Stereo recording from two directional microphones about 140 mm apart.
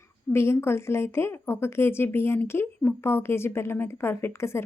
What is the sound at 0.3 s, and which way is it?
A woman's voice, 20° left (ahead or behind).